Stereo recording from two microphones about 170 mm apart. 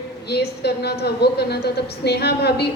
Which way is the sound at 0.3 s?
75° left (ahead or behind).